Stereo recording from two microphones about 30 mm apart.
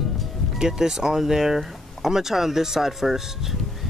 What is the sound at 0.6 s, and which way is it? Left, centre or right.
Speech, centre.